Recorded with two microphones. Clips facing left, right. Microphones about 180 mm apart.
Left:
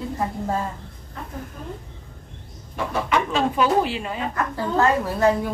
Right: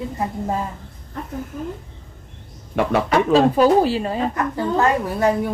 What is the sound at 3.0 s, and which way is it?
Speech, 35° right (ahead or behind).